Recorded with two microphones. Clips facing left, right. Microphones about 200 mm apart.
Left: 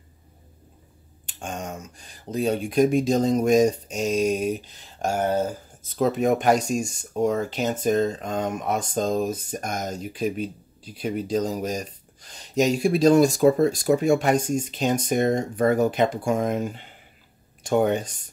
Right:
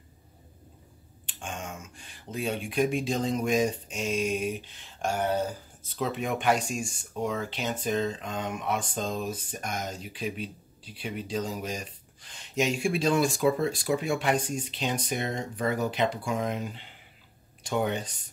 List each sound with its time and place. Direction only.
1.2 s speech: 40° left (ahead or behind)